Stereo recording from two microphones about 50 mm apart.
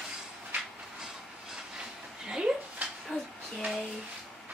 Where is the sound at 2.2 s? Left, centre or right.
Centre.